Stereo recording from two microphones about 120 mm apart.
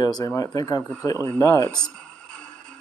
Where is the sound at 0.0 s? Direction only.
30° left (ahead or behind).